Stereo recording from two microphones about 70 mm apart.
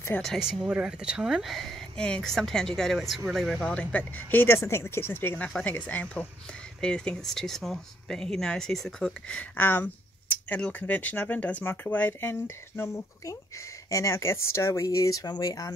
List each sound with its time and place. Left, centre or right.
0.4 s speech: centre
3.7 s speech: left
5.6 s speech: centre
9.6 s speech: left
13.8 s speech: left